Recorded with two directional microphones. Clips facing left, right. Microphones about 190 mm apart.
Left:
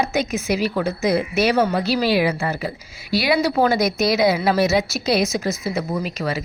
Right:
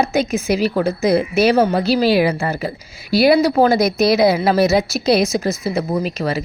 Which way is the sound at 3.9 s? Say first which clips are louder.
Right 4 dB; 30° right (ahead or behind).